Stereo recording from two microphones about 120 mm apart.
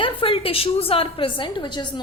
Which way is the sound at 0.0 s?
45° left (ahead or behind).